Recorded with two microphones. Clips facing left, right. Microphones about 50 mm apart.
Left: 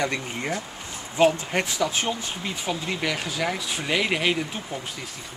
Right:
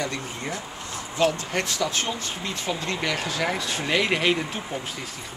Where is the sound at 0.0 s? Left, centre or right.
Left.